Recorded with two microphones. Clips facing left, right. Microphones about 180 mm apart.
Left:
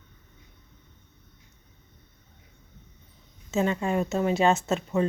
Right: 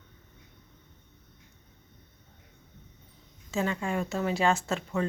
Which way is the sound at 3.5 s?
20° left (ahead or behind).